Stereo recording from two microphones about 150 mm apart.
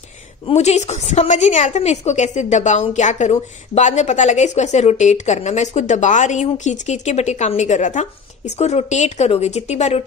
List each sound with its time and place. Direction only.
0.6 s a woman's voice: 50° left (ahead or behind)